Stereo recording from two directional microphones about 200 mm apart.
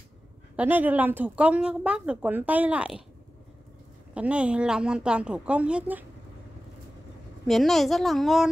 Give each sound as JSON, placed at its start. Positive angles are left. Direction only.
{"t": 0.6, "sound": "speech", "side_deg": -10}
{"t": 4.1, "sound": "a woman's voice", "side_deg": -5}
{"t": 7.4, "sound": "a woman's voice", "side_deg": 0}